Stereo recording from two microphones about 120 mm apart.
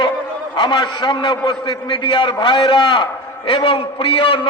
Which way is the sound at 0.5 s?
40° left (ahead or behind).